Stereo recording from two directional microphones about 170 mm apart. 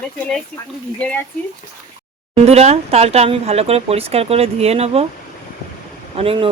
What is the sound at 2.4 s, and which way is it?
Speech, 40° right (ahead or behind).